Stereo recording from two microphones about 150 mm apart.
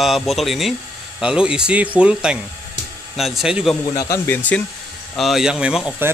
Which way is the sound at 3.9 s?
25° left (ahead or behind).